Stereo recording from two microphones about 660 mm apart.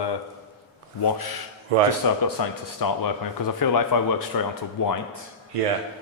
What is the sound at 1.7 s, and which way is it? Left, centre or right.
Speech, right.